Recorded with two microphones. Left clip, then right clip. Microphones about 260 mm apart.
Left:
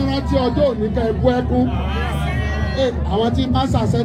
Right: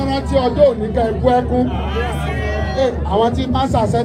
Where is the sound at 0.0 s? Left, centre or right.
Right.